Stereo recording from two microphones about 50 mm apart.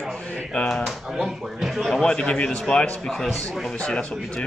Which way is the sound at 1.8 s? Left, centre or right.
Centre.